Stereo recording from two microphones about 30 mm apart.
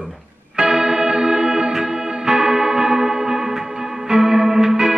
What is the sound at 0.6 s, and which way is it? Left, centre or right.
Music, right.